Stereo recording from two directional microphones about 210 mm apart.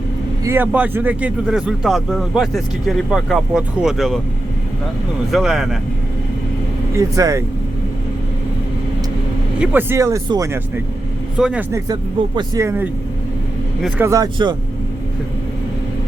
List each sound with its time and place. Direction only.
0.4 s speech: 10° right (ahead or behind)
5.3 s speech: centre (ahead or behind)
6.9 s speech: 15° right (ahead or behind)
9.6 s speech: 10° right (ahead or behind)
11.3 s speech: 5° right (ahead or behind)